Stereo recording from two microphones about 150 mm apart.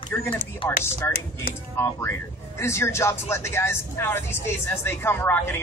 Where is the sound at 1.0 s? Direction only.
15° left (ahead or behind).